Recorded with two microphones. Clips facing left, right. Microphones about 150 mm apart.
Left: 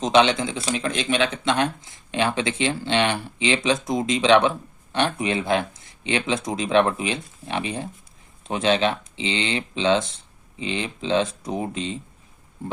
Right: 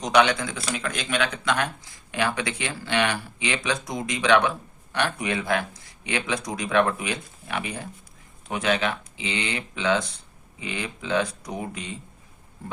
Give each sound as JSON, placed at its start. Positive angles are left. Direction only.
{"t": 0.0, "sound": "speech", "side_deg": 25}